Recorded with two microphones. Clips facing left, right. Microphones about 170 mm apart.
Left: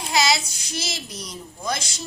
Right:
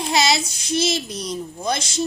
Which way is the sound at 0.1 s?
25° right (ahead or behind).